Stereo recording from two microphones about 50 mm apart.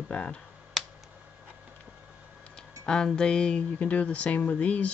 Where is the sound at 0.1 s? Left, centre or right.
Left.